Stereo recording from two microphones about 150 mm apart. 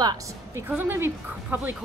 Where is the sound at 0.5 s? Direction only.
15° right (ahead or behind).